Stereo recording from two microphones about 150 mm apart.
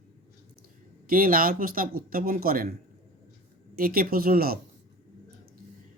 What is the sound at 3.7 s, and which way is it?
Speech, 80° right.